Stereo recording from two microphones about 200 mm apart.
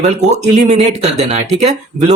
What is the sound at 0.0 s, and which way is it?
Speech, 35° right (ahead or behind).